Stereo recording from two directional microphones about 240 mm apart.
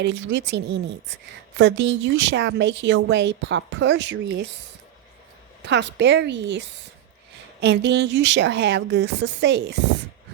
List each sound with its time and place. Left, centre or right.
0.0 s a woman's voice: right
5.6 s a woman's voice: right